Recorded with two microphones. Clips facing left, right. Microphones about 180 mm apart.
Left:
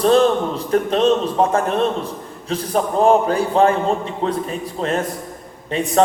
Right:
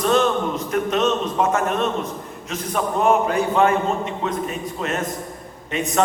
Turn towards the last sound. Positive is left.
turn(degrees=30)  # may be behind; listen again after turning